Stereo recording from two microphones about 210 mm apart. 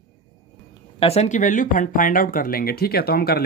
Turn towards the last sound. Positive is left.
turn(degrees=45)  # may be behind; listen again after turning